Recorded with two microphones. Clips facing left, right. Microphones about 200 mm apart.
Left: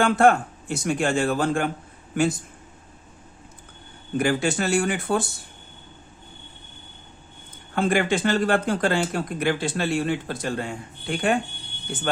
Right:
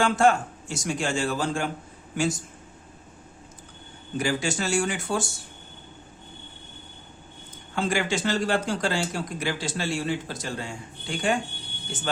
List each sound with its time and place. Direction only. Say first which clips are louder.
0.0 s speech: left 3 dB; 55° left (ahead or behind)
4.2 s speech: left 4 dB; 55° left (ahead or behind)
7.8 s speech: left 4 dB; 55° left (ahead or behind)